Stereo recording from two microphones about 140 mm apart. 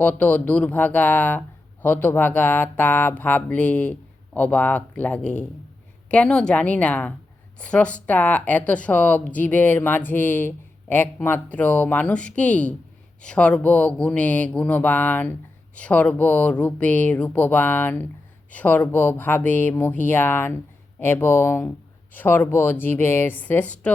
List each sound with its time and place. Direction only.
0.0 s speech: 10° left (ahead or behind)